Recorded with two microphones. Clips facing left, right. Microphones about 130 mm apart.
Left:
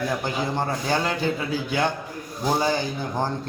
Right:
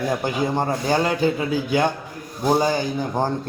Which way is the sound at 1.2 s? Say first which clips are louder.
Right 4 dB; 45° right (ahead or behind).